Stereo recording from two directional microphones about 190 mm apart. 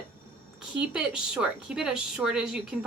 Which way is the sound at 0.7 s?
5° right (ahead or behind).